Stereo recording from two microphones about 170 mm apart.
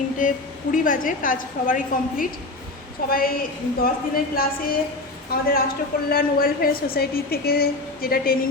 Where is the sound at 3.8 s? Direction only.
60° left (ahead or behind).